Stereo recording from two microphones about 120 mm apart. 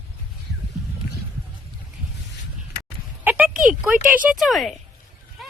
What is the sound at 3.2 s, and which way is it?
Speech, 15° right (ahead or behind).